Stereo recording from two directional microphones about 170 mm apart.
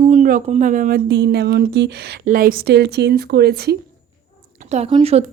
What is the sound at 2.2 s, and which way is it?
Speech, 55° right (ahead or behind).